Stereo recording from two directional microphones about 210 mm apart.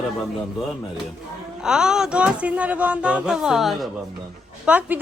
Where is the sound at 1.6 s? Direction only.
5° right (ahead or behind).